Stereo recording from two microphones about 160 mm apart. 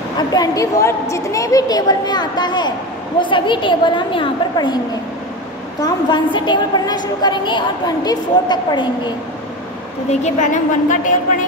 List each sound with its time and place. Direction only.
0.3 s a woman's voice: 20° left (ahead or behind)
5.8 s a woman's voice: 25° left (ahead or behind)
10.2 s a woman's voice: 50° left (ahead or behind)